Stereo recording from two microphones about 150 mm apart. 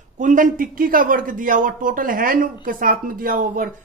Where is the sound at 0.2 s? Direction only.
60° right (ahead or behind).